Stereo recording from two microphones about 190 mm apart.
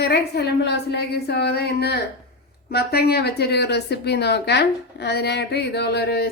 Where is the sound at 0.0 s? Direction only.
55° left (ahead or behind).